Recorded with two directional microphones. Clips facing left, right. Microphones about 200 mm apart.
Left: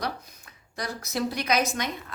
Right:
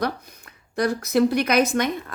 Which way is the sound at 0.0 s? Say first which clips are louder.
Right 7 dB; 55° right (ahead or behind).